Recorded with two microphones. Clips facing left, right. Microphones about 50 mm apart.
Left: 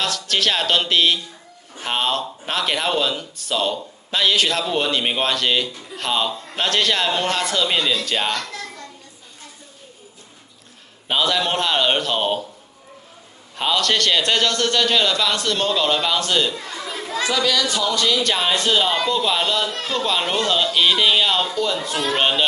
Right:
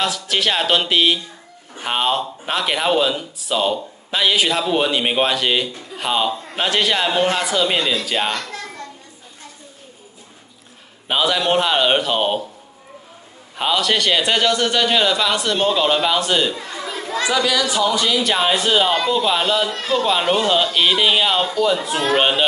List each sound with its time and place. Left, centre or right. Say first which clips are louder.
0.0 s speech: right 1 dB; centre
11.1 s speech: right 2 dB; centre
13.6 s speech: right 1 dB; centre